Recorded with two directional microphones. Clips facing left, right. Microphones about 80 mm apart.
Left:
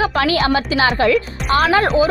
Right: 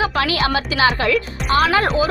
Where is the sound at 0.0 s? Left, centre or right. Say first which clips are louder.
Left 3 dB; left.